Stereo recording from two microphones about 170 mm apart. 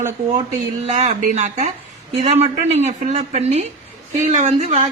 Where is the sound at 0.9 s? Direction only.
40° right (ahead or behind).